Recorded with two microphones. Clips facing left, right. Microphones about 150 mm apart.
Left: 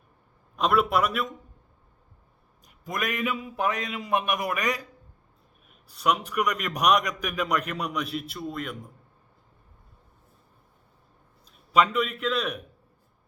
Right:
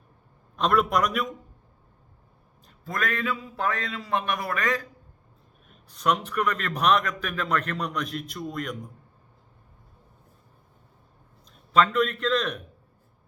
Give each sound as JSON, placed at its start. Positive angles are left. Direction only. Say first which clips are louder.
{"t": 0.5, "sound": "a man's voice", "louder": "even", "side_deg": 5}
{"t": 2.6, "sound": "a man's voice", "louder": "right 1 dB", "side_deg": 15}
{"t": 5.6, "sound": "a man's voice", "louder": "even", "side_deg": 5}
{"t": 11.5, "sound": "a man's voice", "louder": "right 1 dB", "side_deg": 10}